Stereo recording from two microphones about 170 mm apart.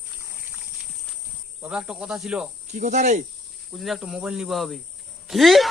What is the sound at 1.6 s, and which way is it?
Speech, 5° right (ahead or behind).